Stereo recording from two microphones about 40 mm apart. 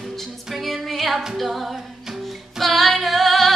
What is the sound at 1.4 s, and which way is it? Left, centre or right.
A capella, centre.